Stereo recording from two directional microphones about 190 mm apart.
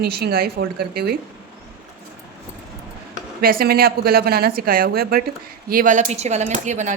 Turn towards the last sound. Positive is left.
turn(degrees=-40)  # may be behind; listen again after turning